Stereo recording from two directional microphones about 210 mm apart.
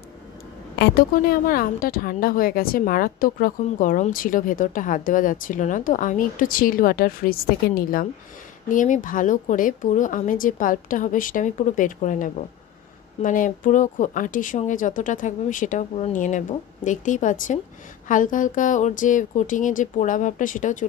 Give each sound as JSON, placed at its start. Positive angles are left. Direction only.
{"t": 0.7, "sound": "a woman's voice", "side_deg": 45}